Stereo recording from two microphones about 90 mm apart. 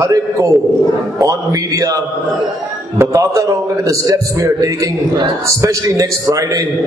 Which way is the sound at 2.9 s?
35° right (ahead or behind).